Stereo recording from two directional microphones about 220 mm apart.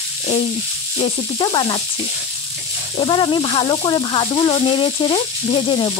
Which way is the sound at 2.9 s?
20° left (ahead or behind).